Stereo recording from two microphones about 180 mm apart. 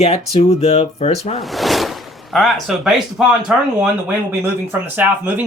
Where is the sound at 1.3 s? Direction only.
Centre (ahead or behind).